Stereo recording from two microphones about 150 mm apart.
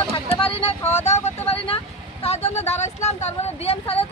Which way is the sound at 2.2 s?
45° left (ahead or behind).